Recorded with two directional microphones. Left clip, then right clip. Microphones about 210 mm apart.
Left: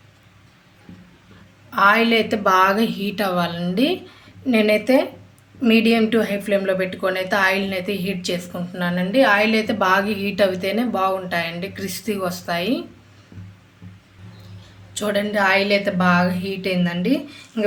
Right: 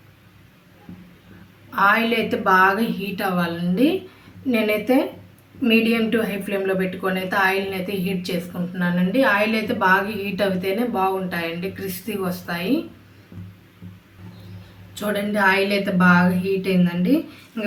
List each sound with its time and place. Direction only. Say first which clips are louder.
1.7 s a woman's voice: left 2 dB; 50° left (ahead or behind)
14.9 s a woman's voice: left 2 dB; 50° left (ahead or behind)